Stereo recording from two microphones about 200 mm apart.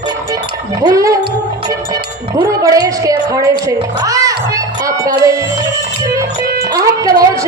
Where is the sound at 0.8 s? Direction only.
15° right (ahead or behind).